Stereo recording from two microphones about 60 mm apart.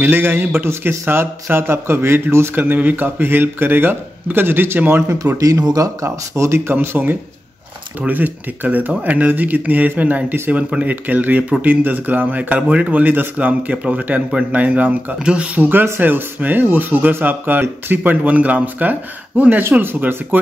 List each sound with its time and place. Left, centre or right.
0.0 s speech: right
2.6 s speech: right
5.4 s speech: right
6.0 s speech: right
6.7 s speech: right
8.0 s a man's voice: right